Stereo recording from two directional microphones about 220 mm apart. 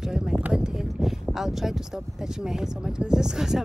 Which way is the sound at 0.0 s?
Centre (ahead or behind).